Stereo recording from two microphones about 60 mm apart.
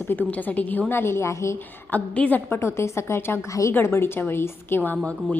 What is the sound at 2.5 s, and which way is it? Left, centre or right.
A woman's voice, left.